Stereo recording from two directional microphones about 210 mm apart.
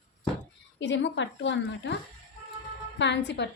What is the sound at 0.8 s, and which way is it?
A woman's voice, 60° left (ahead or behind).